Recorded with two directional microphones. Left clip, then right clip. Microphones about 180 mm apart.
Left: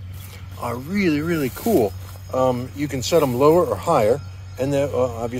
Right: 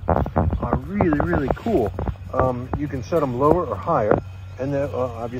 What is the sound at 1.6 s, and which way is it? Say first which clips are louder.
Speech: left 3 dB; 25° left (ahead or behind).